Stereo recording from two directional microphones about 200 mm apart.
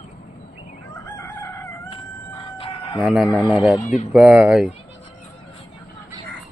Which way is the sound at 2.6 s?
25° left (ahead or behind).